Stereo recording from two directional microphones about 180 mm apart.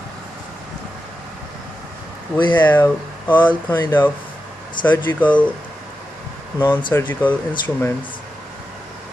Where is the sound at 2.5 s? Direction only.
10° left (ahead or behind).